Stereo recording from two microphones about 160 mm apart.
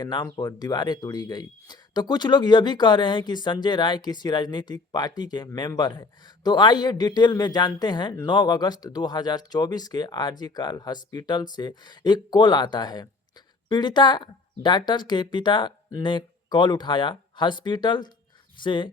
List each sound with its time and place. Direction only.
0.0 s speech: 25° left (ahead or behind)